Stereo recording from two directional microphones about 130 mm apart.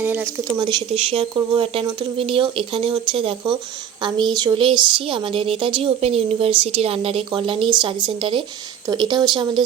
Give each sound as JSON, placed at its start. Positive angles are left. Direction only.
{"t": 0.0, "sound": "speech", "side_deg": -15}
{"t": 0.6, "sound": "speech", "side_deg": -35}